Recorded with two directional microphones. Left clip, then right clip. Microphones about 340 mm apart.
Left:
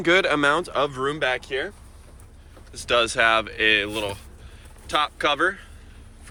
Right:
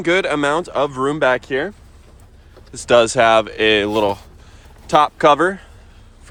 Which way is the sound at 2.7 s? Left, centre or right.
Centre.